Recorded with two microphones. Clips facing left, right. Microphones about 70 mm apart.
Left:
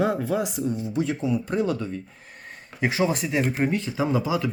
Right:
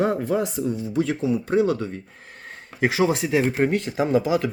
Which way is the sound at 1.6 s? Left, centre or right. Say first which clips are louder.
Right 3 dB; right.